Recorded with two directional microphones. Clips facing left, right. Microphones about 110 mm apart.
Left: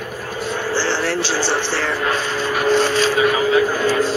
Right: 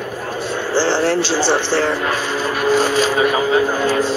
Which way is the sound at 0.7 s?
20° right (ahead or behind).